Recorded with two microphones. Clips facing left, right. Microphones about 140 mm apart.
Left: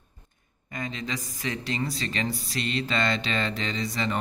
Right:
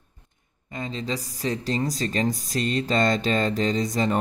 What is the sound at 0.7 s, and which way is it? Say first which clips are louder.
A man's voice: right 3 dB; 30° right (ahead or behind).